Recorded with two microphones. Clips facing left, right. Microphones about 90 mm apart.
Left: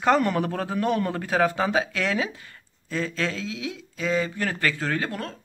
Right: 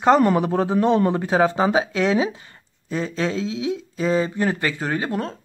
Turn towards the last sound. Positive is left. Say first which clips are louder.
# right 4 dB
turn(degrees=-20)  # may be behind; listen again after turning